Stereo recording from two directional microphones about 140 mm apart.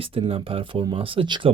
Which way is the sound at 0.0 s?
40° right (ahead or behind).